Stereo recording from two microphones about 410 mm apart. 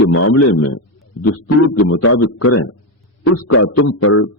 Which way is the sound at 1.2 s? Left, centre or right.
Left.